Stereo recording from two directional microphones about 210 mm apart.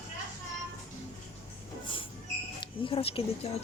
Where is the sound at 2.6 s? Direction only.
25° left (ahead or behind).